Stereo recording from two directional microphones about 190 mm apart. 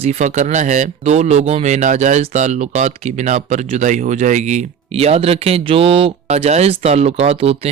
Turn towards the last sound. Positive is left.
turn(degrees=-30)  # may be behind; listen again after turning